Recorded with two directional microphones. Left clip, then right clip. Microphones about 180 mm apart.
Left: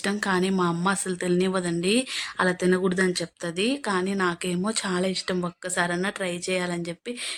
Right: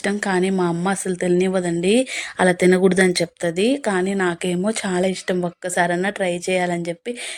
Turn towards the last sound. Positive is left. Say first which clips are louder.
# right 7 dB
turn(degrees=-20)  # may be behind; listen again after turning